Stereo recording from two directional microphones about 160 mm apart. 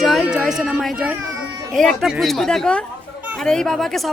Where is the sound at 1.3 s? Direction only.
20° right (ahead or behind).